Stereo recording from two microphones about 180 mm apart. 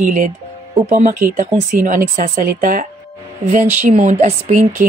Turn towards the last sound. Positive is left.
turn(degrees=-45)  # may be behind; listen again after turning